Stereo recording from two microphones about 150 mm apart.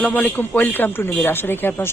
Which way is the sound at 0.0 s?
10° left (ahead or behind).